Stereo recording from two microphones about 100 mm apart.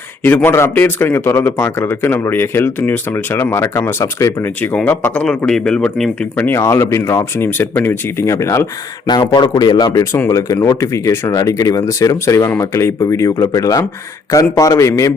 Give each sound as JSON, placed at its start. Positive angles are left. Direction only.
{"t": 0.2, "sound": "speech", "side_deg": 15}
{"t": 4.4, "sound": "speech", "side_deg": 15}
{"t": 9.0, "sound": "speech", "side_deg": 45}